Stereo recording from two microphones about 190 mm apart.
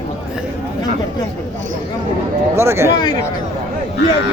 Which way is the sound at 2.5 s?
15° right (ahead or behind).